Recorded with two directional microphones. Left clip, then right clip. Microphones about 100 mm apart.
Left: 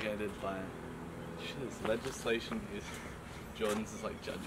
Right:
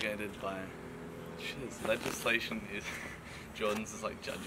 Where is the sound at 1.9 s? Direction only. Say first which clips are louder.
Right 4 dB; 25° right (ahead or behind).